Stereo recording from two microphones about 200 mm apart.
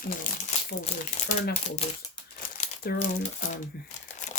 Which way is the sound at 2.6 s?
45° left (ahead or behind).